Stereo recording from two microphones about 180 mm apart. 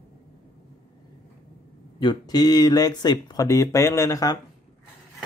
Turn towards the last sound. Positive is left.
turn(degrees=20)  # may be behind; listen again after turning